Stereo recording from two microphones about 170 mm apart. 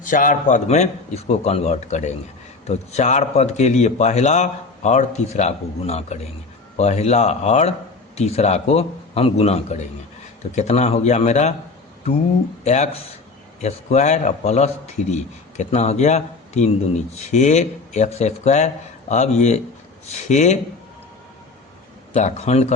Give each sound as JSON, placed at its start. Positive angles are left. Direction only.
{"t": 0.0, "sound": "a man's voice", "side_deg": 50}
{"t": 12.6, "sound": "a man's voice", "side_deg": 40}
{"t": 22.1, "sound": "a man's voice", "side_deg": 40}